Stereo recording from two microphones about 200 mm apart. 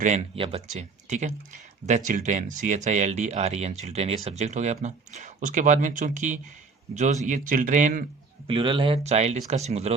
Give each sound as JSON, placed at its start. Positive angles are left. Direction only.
{"t": 0.0, "sound": "speech", "side_deg": -30}
{"t": 8.4, "sound": "speech", "side_deg": -25}